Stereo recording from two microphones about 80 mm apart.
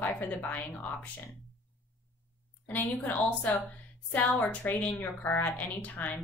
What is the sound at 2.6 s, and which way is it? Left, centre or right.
A woman's voice, left.